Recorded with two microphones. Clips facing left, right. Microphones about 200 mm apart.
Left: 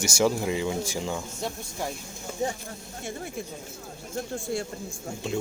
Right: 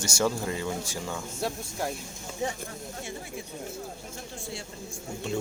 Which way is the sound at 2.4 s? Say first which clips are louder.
Left 2 dB; 35° left (ahead or behind).